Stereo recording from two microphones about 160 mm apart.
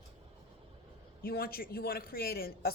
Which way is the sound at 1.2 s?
70° left (ahead or behind).